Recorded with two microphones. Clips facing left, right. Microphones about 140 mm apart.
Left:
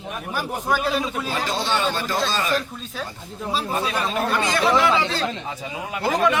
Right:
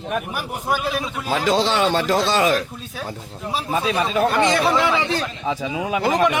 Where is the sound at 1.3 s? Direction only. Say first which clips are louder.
Right 7 dB; 90° right.